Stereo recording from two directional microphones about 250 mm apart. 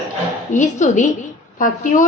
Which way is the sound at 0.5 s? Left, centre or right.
Left.